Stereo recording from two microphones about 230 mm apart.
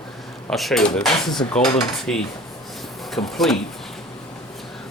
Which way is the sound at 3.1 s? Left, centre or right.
Centre.